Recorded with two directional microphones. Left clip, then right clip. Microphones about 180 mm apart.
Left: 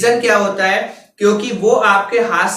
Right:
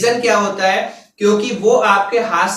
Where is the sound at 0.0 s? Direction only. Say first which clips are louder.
Left 1 dB; 15° left (ahead or behind).